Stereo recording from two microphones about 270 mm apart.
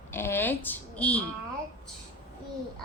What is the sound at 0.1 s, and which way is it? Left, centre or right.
Speech, centre.